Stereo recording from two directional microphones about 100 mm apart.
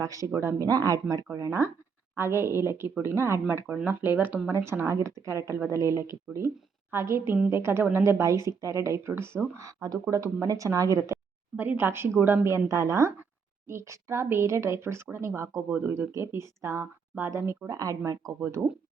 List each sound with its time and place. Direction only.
0.0 s speech: 35° right (ahead or behind)
11.5 s speech: 15° right (ahead or behind); by 18.3 s 35° right (ahead or behind)
18.3 s speech: 25° right (ahead or behind)